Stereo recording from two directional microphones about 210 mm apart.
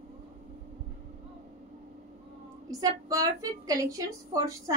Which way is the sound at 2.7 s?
15° right (ahead or behind).